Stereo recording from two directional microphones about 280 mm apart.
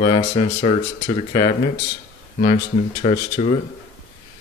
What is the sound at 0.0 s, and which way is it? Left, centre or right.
Speech, centre.